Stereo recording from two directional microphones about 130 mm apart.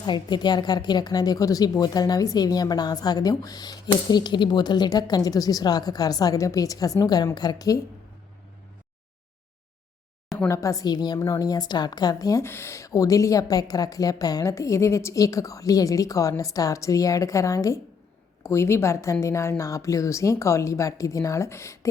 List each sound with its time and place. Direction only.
0.0 s a woman's voice: 35° left (ahead or behind)
10.3 s speech: 20° left (ahead or behind)